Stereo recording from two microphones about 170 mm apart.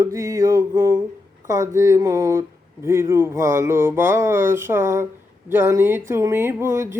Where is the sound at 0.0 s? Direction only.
15° right (ahead or behind).